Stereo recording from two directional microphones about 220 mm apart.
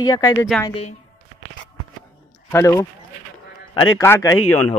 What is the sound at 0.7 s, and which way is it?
Speech, 30° left (ahead or behind).